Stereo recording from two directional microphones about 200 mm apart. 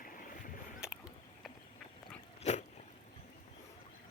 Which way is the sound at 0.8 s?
5° right (ahead or behind).